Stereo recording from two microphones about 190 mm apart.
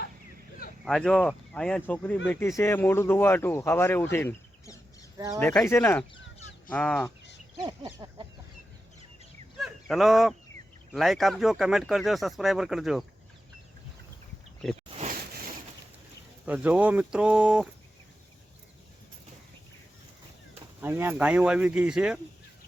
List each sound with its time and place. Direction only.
0.9 s speech: 5° left (ahead or behind)
5.1 s speech: 15° right (ahead or behind)
5.4 s speech: 5° left (ahead or behind)
7.6 s a sound: 25° right (ahead or behind)
9.6 s a sound: centre (ahead or behind)
10.9 s speech: centre (ahead or behind)
14.6 s speech: centre (ahead or behind)
16.5 s speech: 5° right (ahead or behind)
20.8 s speech: 10° right (ahead or behind)